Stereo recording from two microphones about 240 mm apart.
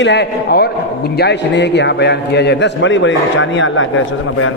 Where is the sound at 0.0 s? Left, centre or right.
Left.